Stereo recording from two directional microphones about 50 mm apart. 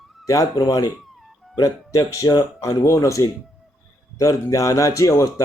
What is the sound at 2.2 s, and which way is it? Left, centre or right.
Speech, left.